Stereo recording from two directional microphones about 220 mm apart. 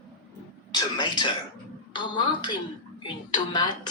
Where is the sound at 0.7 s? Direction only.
20° left (ahead or behind).